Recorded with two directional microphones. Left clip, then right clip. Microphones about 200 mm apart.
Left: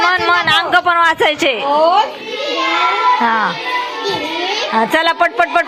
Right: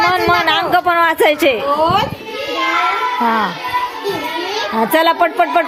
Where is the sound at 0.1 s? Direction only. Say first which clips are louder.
Left 1 dB; 10° right (ahead or behind).